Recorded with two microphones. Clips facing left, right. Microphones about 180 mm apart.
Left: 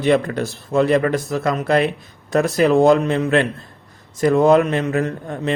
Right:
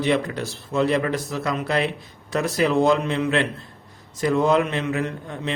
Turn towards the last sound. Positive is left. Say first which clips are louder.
# left 6 dB
turn(degrees=45)  # may be behind; listen again after turning